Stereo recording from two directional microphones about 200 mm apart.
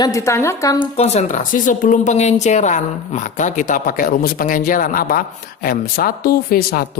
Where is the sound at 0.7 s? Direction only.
35° left (ahead or behind).